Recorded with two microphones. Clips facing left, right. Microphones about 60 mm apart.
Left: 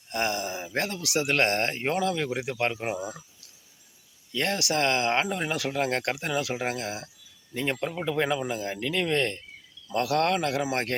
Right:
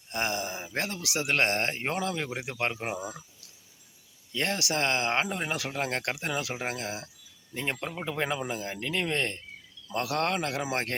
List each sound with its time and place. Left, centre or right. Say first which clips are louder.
0.1 s speech: left 2 dB; right
4.3 s speech: left 2 dB; centre
6.1 s speech: left 3 dB; centre
7.8 s speech: left 5 dB; centre